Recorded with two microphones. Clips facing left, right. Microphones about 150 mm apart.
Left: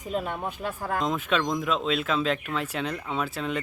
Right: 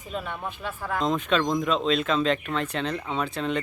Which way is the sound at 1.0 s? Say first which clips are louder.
Right 3 dB; 5° left (ahead or behind).